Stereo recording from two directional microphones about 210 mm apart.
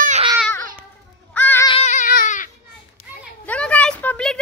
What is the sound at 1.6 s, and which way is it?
Baby cry, 30° left (ahead or behind).